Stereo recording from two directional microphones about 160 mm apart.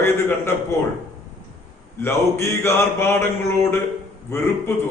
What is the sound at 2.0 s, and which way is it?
A man's voice, 15° left (ahead or behind).